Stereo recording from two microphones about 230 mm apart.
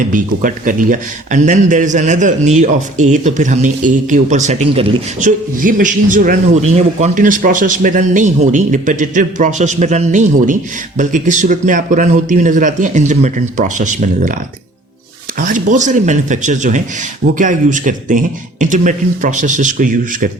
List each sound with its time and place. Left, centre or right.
0.1 s a man's voice: right
5.5 s a man's voice: right
15.4 s a man's voice: right